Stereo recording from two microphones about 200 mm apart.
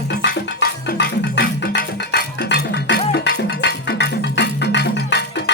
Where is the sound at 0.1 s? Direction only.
55° left (ahead or behind).